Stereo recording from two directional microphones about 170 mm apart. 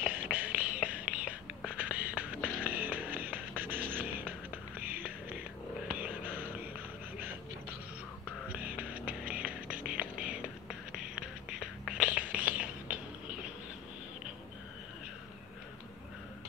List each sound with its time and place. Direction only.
0.0 s a sound: 10° right (ahead or behind)
0.7 s whispering: 10° right (ahead or behind)
1.7 s a sound: 10° right (ahead or behind)
2.6 s music: 10° right (ahead or behind)
5.9 s whispering: 10° right (ahead or behind)
8.5 s music: 10° right (ahead or behind)
11.1 s whispering: 5° right (ahead or behind)